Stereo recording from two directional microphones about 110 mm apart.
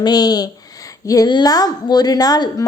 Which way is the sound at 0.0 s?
35° left (ahead or behind).